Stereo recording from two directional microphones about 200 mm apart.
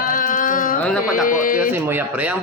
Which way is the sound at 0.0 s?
45° left (ahead or behind).